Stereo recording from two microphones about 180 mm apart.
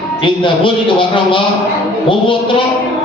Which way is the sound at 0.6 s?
30° left (ahead or behind).